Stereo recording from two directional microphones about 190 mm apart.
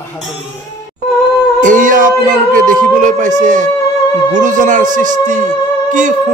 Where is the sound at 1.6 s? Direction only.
40° right (ahead or behind).